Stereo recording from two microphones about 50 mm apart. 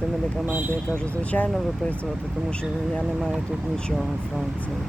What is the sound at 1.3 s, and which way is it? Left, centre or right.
Speech, left.